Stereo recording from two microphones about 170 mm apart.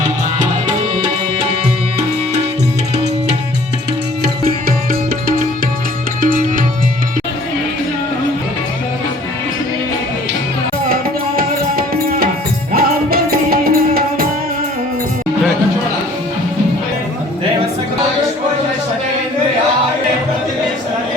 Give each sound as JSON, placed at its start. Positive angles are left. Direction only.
{"t": 6.2, "sound": "music", "side_deg": -55}
{"t": 11.3, "sound": "music", "side_deg": -60}